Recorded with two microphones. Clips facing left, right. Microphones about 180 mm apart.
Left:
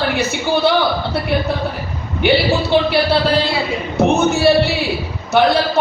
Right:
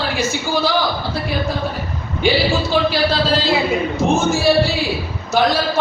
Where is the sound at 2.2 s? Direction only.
65° left (ahead or behind).